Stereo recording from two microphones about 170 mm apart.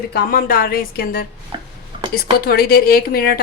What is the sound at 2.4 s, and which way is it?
A woman's voice, 65° left (ahead or behind).